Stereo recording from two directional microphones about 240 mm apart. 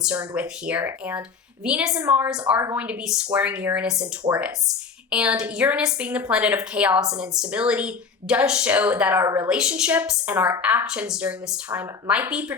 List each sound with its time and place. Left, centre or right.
0.0 s speech: centre